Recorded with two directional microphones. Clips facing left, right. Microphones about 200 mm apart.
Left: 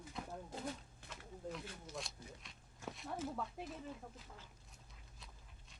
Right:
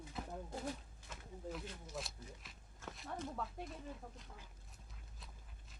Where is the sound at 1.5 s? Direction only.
5° right (ahead or behind).